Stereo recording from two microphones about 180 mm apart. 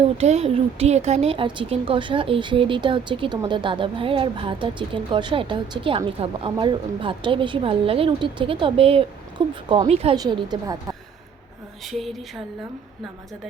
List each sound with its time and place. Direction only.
0.2 s a woman's voice: 35° right (ahead or behind)
10.2 s speech: 25° right (ahead or behind)
11.9 s speech: centre (ahead or behind)